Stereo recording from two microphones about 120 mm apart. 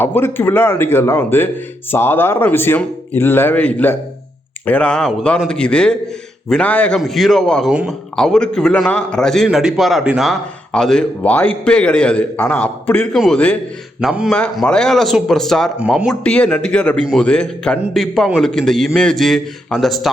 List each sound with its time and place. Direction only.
0.0 s a man's voice: 20° left (ahead or behind)
7.0 s a man's voice: centre (ahead or behind)
7.7 s speech: 10° right (ahead or behind)
8.1 s a man's voice: 5° left (ahead or behind)
13.1 s a man's voice: centre (ahead or behind)
14.5 s a man's voice: 5° left (ahead or behind)
16.2 s a man's voice: 10° left (ahead or behind)